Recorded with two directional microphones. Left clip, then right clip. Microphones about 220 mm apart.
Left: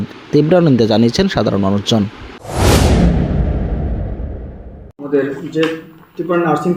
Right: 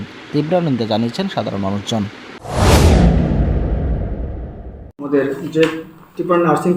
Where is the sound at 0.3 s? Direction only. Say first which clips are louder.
Left 6 dB; 30° left (ahead or behind).